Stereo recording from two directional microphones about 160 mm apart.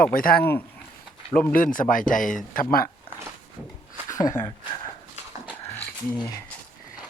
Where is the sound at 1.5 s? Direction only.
55° left (ahead or behind).